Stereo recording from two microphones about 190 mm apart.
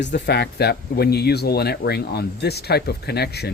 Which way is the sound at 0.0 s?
65° left (ahead or behind).